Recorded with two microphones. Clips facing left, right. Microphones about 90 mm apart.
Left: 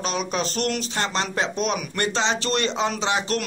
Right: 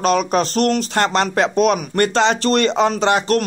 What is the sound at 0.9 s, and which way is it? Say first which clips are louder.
A man's voice: right 8 dB; 60° right (ahead or behind).